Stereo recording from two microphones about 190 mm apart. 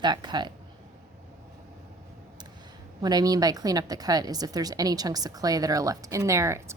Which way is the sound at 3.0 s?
20° right (ahead or behind).